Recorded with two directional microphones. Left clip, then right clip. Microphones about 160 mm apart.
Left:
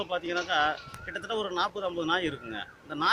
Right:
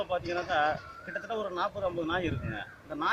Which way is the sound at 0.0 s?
40° left (ahead or behind).